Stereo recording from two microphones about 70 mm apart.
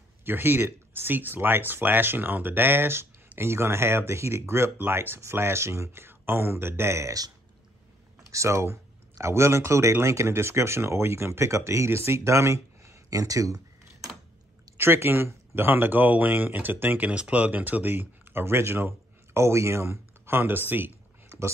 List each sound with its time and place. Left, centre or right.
0.2 s speech: right
8.3 s speech: right
14.8 s speech: right